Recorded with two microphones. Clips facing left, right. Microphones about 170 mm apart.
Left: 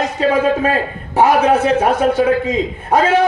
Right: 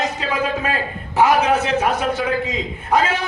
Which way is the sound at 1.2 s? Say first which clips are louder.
Left 4 dB; 55° left (ahead or behind).